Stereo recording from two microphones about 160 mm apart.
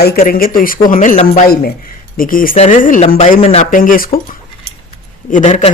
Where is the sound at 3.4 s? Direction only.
45° left (ahead or behind); by 4.1 s 60° left (ahead or behind).